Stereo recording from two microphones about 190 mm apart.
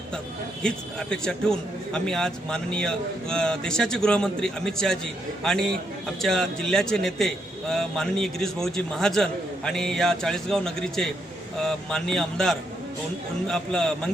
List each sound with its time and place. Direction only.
0.6 s a man's voice: 5° left (ahead or behind)